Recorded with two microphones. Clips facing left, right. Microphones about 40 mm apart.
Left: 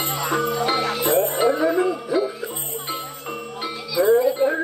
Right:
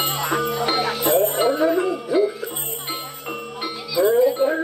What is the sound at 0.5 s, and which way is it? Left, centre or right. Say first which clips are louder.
Music: even; centre.